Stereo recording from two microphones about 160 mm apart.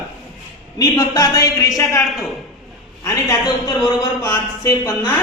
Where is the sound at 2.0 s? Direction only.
Centre (ahead or behind).